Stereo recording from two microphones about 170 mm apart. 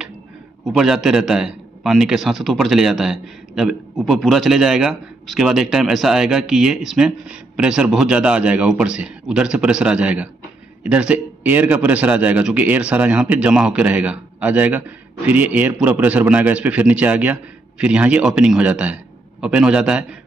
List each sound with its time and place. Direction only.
0.7 s a man's voice: 5° right (ahead or behind)